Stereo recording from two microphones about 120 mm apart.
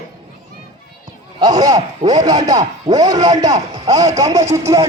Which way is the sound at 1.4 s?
30° right (ahead or behind).